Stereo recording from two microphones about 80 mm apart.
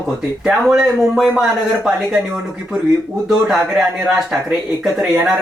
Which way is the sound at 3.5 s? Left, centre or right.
Centre.